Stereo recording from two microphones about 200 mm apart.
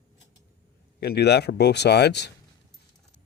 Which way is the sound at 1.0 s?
55° left (ahead or behind).